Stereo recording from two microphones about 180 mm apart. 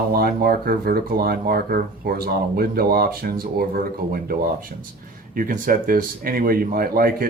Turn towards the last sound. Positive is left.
turn(degrees=-55)  # may be behind; listen again after turning